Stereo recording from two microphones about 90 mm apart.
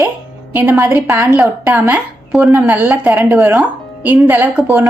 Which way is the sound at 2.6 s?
15° right (ahead or behind).